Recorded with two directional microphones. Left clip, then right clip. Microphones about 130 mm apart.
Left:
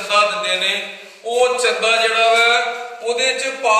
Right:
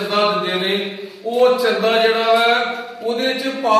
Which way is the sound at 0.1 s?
15° left (ahead or behind).